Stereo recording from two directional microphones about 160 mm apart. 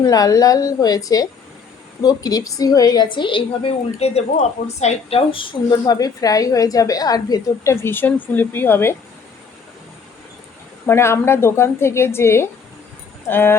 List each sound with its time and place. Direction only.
0.0 s a woman's voice: 20° left (ahead or behind)
10.8 s a woman's voice: 15° left (ahead or behind)